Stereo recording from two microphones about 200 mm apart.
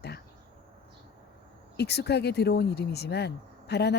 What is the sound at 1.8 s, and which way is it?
Speech, 55° left (ahead or behind).